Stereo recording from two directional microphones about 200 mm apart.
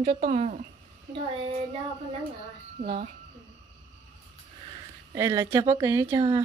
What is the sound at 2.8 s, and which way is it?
Speech, 30° right (ahead or behind).